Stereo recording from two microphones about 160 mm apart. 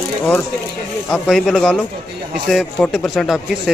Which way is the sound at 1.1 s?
Centre (ahead or behind).